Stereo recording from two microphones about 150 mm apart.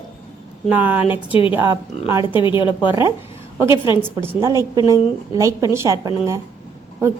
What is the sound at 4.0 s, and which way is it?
A woman's voice, 15° right (ahead or behind).